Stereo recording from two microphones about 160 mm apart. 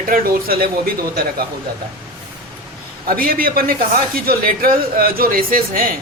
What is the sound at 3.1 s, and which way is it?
Speech, 65° right (ahead or behind).